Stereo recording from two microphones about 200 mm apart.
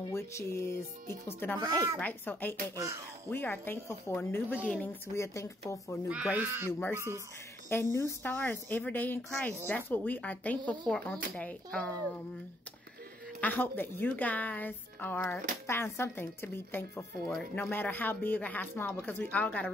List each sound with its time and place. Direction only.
0.1 s speech: 15° left (ahead or behind)
1.6 s speech: 20° right (ahead or behind)
2.0 s speech: 10° left (ahead or behind)
2.7 s speech: 15° right (ahead or behind)
3.3 s speech: 10° left (ahead or behind)
6.0 s speech: 5° right (ahead or behind)
7.9 s speech: 15° left (ahead or behind)
13.4 s speech: 10° left (ahead or behind)